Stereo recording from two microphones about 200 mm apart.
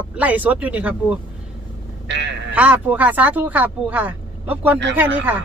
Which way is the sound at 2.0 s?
60° right (ahead or behind).